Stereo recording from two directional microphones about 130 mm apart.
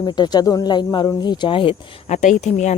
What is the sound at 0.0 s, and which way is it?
Speech, 30° left (ahead or behind).